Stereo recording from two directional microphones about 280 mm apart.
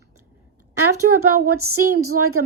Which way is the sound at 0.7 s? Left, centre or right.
Right.